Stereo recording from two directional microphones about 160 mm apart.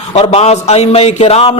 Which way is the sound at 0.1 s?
40° left (ahead or behind).